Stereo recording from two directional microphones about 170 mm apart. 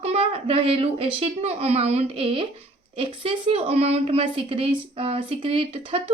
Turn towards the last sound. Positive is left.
turn(degrees=-35)  # may be behind; listen again after turning